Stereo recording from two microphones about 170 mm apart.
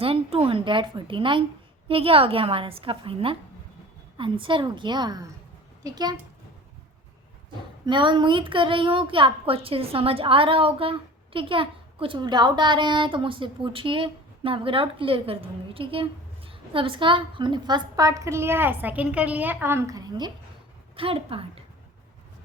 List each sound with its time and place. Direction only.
0.0 s a woman's voice: 35° right (ahead or behind)
7.9 s a woman's voice: 25° right (ahead or behind)